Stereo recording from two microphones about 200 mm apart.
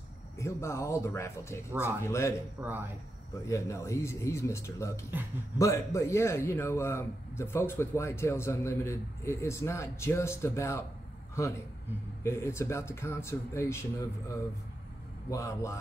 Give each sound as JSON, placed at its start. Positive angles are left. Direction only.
{"t": 0.4, "sound": "a man's voice", "side_deg": 15}
{"t": 1.7, "sound": "speech", "side_deg": -10}
{"t": 2.0, "sound": "a man's voice", "side_deg": 15}
{"t": 2.6, "sound": "speech", "side_deg": -10}
{"t": 3.4, "sound": "a man's voice", "side_deg": 15}
{"t": 15.2, "sound": "a man's voice", "side_deg": 15}